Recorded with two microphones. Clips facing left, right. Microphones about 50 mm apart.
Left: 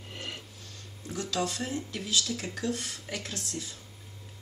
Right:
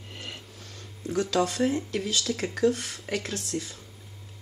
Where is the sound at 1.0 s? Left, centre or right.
Right.